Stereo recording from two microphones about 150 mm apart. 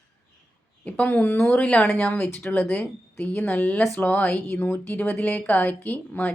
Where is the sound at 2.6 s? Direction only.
Centre (ahead or behind).